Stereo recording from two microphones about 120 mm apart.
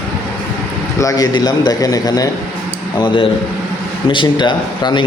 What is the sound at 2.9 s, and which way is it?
A man's voice, 40° left (ahead or behind).